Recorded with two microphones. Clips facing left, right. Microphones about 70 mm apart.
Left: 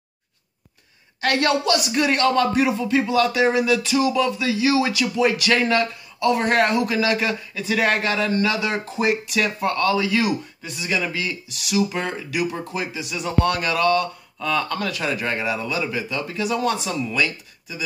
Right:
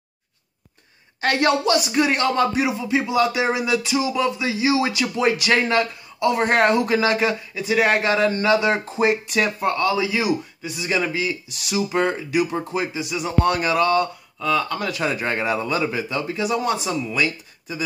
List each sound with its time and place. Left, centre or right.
1.2 s speech: right
14.4 s speech: centre
14.8 s speech: right